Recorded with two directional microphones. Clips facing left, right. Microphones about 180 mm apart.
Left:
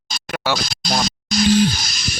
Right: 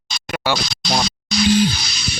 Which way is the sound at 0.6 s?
50° left (ahead or behind).